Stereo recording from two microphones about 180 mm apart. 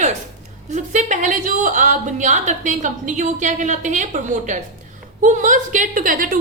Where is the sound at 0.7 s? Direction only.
40° right (ahead or behind).